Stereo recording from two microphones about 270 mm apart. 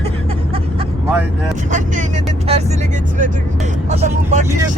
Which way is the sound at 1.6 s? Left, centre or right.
Right.